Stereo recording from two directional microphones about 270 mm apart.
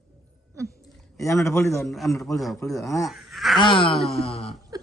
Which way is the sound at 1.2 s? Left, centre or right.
Centre.